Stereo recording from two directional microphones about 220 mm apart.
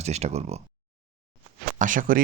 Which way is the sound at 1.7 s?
35° right (ahead or behind).